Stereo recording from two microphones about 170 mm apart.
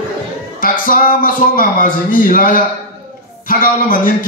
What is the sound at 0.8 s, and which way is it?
A man's voice, 55° left (ahead or behind).